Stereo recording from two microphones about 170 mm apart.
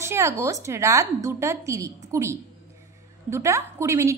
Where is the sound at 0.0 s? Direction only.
15° right (ahead or behind).